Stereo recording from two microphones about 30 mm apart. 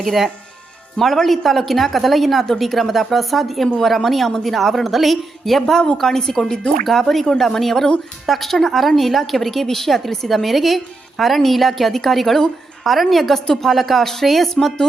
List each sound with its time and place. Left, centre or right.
0.0 s a woman's voice: centre
1.0 s a woman's voice: centre
14.0 s speech: centre
14.3 s a woman's voice: centre